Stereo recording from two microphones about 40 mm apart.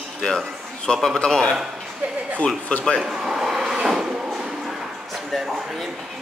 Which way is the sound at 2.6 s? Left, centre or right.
Left.